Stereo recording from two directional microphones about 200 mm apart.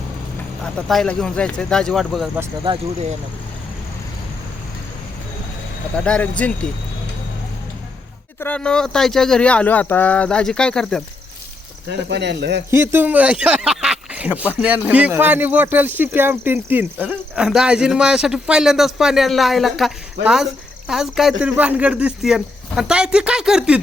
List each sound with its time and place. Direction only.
0.6 s speech: centre (ahead or behind)
2.6 s speech: 35° right (ahead or behind)
6.0 s speech: 5° left (ahead or behind)
8.4 s speech: 5° left (ahead or behind)
11.9 s speech: 60° right (ahead or behind)
12.7 s speech: 10° right (ahead or behind)